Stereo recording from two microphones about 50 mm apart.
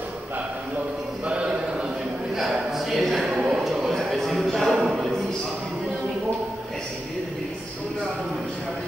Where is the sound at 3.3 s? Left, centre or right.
Right.